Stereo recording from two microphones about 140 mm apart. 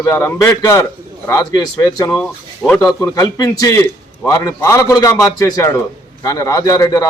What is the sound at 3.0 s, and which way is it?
A man's voice, 25° left (ahead or behind).